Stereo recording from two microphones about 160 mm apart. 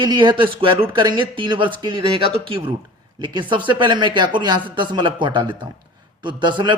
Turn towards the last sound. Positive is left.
turn(degrees=-30)  # may be behind; listen again after turning